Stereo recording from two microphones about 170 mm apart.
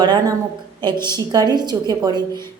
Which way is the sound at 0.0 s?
25° right (ahead or behind).